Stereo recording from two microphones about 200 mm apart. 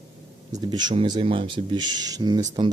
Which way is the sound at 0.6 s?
20° right (ahead or behind).